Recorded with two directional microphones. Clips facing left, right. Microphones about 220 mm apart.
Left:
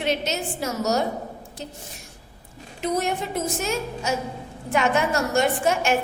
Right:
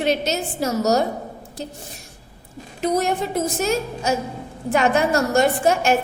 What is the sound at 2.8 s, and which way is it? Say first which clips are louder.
A woman's voice: right 4 dB; 40° right (ahead or behind).